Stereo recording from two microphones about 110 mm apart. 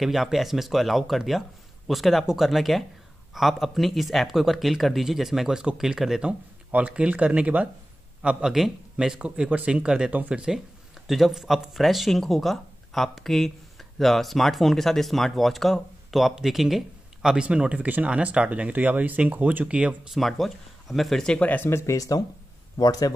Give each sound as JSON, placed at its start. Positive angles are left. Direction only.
{"t": 0.0, "sound": "a man's voice", "side_deg": 0}
{"t": 20.2, "sound": "speech", "side_deg": 0}
{"t": 21.5, "sound": "a man's voice", "side_deg": 20}